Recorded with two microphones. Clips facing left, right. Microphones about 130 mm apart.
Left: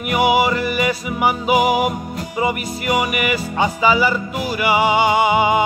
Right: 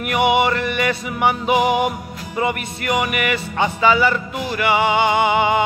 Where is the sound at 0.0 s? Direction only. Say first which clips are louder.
Left 1 dB; 5° left (ahead or behind).